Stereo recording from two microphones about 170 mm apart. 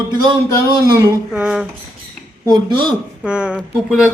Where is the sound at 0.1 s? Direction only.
25° right (ahead or behind).